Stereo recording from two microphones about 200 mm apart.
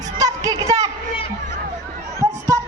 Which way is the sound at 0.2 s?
20° right (ahead or behind).